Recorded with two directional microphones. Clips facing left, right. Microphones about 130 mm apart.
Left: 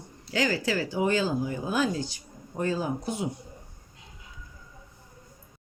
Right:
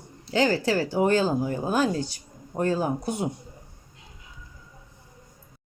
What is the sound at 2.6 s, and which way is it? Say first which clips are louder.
Speech: right 4 dB; 55° right (ahead or behind).